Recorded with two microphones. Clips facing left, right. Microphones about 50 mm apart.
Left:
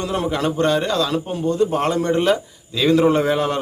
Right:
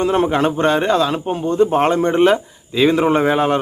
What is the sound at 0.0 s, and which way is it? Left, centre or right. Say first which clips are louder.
A man's voice: right 6 dB; right.